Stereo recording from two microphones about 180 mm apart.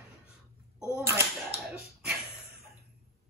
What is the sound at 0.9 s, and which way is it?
Speech, 15° right (ahead or behind).